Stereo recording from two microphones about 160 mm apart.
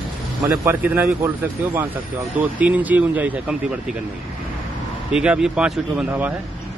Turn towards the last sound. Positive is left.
turn(degrees=-10)  # may be behind; listen again after turning